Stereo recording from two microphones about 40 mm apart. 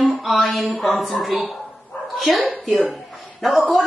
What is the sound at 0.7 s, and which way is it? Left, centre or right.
A woman's voice, centre.